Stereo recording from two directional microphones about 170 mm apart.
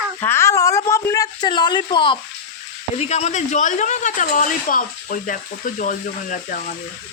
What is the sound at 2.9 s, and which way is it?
Speech, 40° left (ahead or behind).